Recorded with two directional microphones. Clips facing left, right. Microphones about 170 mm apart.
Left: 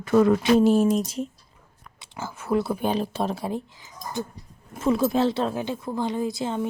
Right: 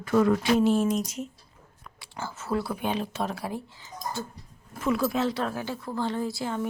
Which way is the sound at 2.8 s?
35° left (ahead or behind).